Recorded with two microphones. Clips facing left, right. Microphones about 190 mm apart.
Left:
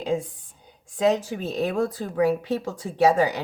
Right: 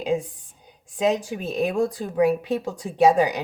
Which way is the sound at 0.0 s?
15° right (ahead or behind).